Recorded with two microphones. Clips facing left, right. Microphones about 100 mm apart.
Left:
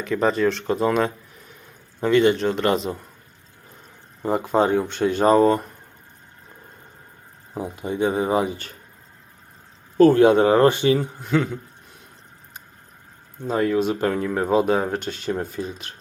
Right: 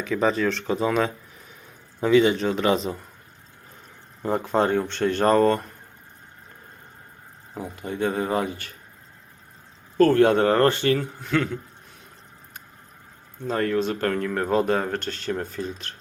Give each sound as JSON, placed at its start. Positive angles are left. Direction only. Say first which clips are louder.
{"t": 0.0, "sound": "speech", "louder": "left 2 dB", "side_deg": 0}
{"t": 4.2, "sound": "speech", "louder": "left 2 dB", "side_deg": 5}
{"t": 7.5, "sound": "speech", "louder": "left 4 dB", "side_deg": 20}
{"t": 10.0, "sound": "speech", "louder": "left 3 dB", "side_deg": 10}
{"t": 13.4, "sound": "speech", "louder": "left 3 dB", "side_deg": 10}